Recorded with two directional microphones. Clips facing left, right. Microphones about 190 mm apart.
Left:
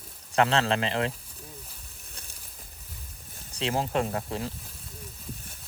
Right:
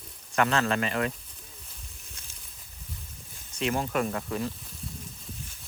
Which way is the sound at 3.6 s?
30° left (ahead or behind).